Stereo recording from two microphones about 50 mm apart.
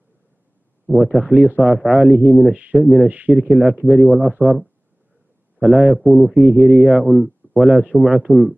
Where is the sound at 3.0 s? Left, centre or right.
Right.